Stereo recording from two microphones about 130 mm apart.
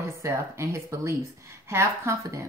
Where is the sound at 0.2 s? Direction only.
20° right (ahead or behind).